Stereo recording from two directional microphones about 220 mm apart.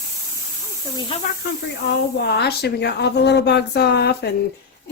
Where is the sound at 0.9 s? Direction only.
25° left (ahead or behind).